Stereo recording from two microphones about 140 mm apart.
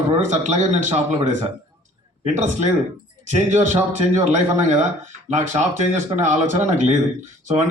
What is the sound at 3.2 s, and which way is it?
Speech, 60° right (ahead or behind).